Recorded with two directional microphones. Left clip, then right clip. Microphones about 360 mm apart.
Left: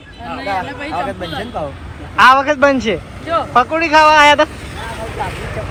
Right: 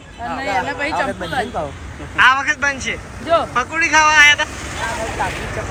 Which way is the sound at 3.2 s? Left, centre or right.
Right.